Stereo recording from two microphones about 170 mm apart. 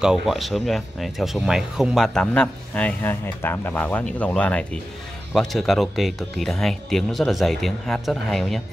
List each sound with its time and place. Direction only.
0.0 s speech: centre (ahead or behind)